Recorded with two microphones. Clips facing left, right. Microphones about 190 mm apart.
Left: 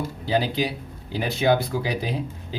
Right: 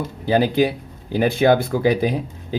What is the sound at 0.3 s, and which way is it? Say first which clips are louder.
Speech: right 7 dB; 50° right (ahead or behind).